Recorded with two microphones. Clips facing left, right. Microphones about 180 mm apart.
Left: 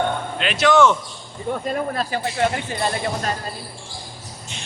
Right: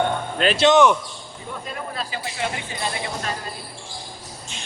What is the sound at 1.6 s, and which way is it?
Speech, 50° left (ahead or behind).